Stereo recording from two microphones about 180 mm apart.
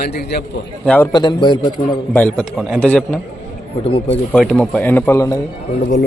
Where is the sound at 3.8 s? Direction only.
35° left (ahead or behind).